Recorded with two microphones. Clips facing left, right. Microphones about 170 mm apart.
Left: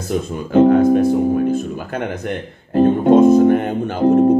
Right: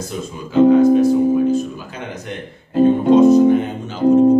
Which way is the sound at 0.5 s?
55° left (ahead or behind).